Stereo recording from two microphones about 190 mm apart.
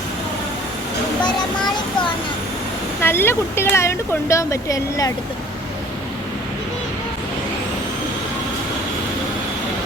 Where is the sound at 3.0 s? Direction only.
10° left (ahead or behind).